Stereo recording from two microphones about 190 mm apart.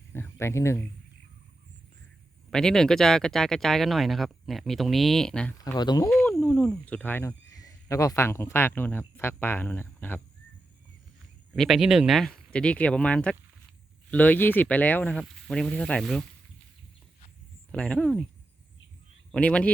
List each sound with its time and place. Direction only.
0.1 s a sound: 15° left (ahead or behind)
2.5 s speech: 5° left (ahead or behind)
5.5 s speech: 20° left (ahead or behind)
6.1 s speech: centre (ahead or behind)
11.5 s speech: centre (ahead or behind)
17.7 s speech: 5° left (ahead or behind)
19.3 s a man's voice: 5° left (ahead or behind)